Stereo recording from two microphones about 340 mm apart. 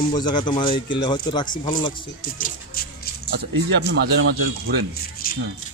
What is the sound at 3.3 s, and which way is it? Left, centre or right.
Speech, right.